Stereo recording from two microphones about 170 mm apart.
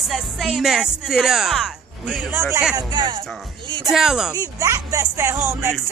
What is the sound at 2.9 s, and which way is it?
Speech, 25° right (ahead or behind).